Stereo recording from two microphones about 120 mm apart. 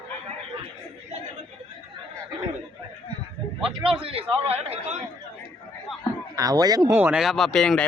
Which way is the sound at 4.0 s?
55° right (ahead or behind).